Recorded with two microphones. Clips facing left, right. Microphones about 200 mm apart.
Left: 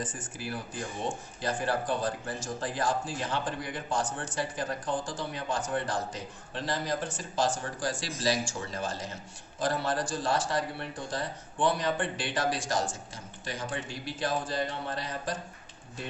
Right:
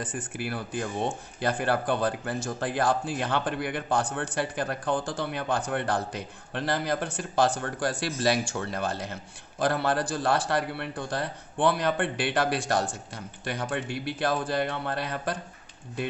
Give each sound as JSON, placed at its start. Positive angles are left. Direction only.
{"t": 0.0, "sound": "speech", "side_deg": -60}